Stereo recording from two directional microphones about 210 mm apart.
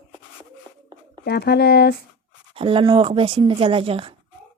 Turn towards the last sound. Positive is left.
turn(degrees=-25)  # may be behind; listen again after turning